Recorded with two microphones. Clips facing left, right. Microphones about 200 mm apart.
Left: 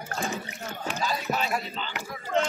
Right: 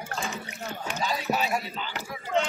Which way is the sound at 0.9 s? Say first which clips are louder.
Even; 15° right (ahead or behind).